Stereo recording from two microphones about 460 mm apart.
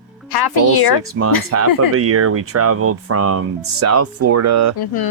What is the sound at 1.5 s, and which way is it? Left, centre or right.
Speech, right.